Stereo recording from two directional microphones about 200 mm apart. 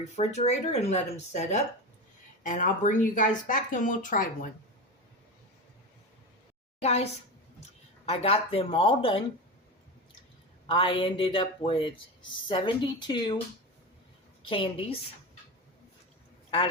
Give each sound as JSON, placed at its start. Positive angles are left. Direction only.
{"t": 0.0, "sound": "speech", "side_deg": 35}
{"t": 6.8, "sound": "speech", "side_deg": 30}
{"t": 10.7, "sound": "speech", "side_deg": 25}
{"t": 14.4, "sound": "speech", "side_deg": 25}